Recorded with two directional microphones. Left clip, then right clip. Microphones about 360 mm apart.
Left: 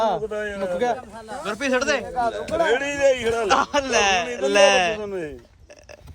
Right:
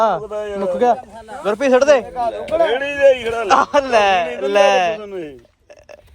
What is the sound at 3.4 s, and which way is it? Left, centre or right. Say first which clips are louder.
A man's voice: right 8 dB; centre.